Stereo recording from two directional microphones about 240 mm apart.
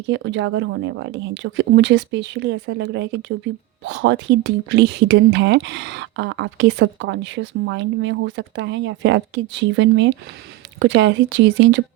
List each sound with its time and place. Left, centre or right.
0.1 s speech: right